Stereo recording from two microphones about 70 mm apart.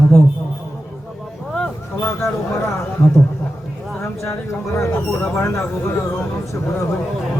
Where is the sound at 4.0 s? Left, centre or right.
Left.